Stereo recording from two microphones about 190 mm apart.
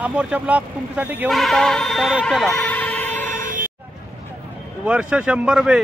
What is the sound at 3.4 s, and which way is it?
Vehicle, 45° right (ahead or behind).